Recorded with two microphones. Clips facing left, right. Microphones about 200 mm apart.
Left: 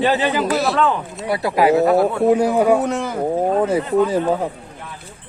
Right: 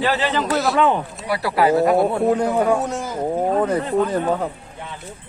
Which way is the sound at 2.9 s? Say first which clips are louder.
Left 4 dB; 60° left (ahead or behind).